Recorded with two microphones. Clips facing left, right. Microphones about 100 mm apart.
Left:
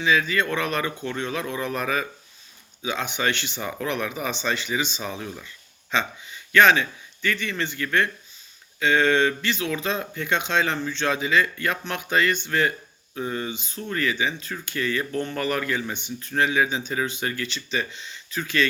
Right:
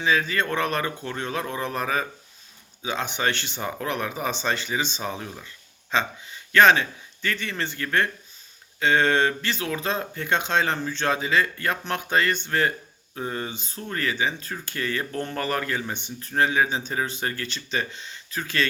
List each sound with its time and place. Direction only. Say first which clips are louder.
0.0 s speech: left 1 dB; 40° right (ahead or behind)